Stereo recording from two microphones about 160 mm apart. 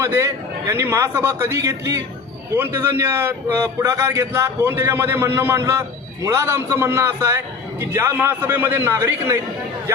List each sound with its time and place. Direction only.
0.0 s a man's voice: 15° right (ahead or behind)